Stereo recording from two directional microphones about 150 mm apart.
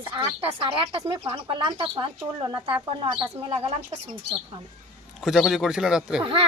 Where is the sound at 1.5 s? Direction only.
35° right (ahead or behind).